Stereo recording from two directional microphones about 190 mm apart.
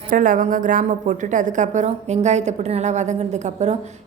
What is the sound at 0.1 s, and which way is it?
A woman's voice, 45° right (ahead or behind).